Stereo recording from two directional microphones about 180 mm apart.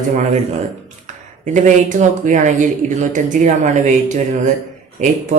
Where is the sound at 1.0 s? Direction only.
45° right (ahead or behind).